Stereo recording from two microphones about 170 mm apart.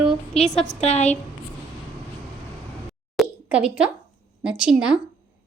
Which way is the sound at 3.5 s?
5° right (ahead or behind).